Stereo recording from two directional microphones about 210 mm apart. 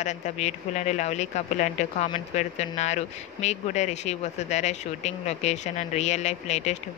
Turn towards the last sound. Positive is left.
turn(degrees=30)  # may be behind; listen again after turning